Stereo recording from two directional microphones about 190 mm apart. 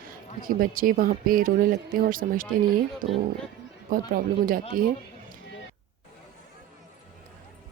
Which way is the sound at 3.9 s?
50° right (ahead or behind).